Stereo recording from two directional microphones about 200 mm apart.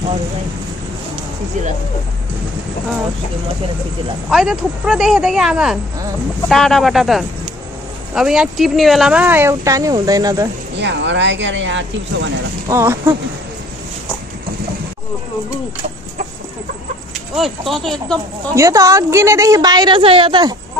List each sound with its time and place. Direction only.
4.3 s speech: centre (ahead or behind); by 10.5 s 15° right (ahead or behind)
10.8 s speech: 60° right (ahead or behind)
12.6 s speech: 15° right (ahead or behind)
17.4 s speech: centre (ahead or behind)
18.5 s speech: 15° right (ahead or behind)